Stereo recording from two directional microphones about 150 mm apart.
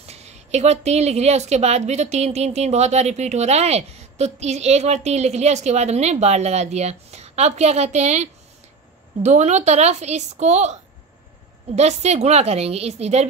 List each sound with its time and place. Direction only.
0.0 s a woman's voice: 45° right (ahead or behind)